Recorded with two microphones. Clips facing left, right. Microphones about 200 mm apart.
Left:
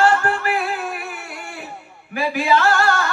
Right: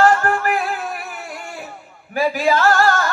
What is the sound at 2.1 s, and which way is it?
Speech, 40° right (ahead or behind).